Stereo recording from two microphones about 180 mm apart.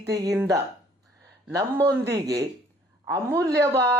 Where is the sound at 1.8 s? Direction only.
70° right (ahead or behind).